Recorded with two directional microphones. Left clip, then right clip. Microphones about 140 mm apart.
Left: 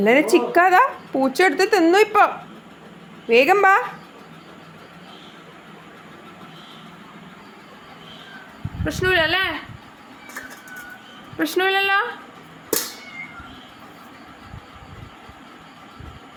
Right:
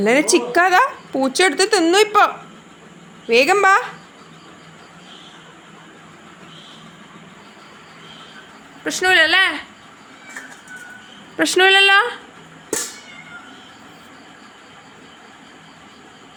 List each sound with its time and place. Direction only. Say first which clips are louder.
0.0 s speech: even; centre (ahead or behind)
8.8 s speech: right 5 dB; 30° right (ahead or behind)
11.3 s speech: right 7 dB; 35° right (ahead or behind)